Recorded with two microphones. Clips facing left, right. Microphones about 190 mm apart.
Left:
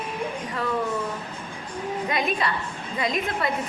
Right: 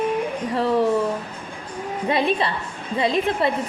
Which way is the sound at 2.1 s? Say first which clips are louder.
Right 6 dB; 30° right (ahead or behind).